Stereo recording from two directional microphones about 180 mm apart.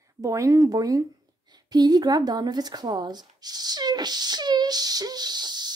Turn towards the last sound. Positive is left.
turn(degrees=-25)  # may be behind; listen again after turning